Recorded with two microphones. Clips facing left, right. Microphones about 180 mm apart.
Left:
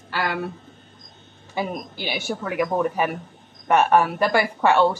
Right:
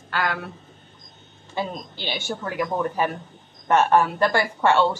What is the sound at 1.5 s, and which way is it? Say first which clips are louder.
Speech: left 2 dB; 10° left (ahead or behind).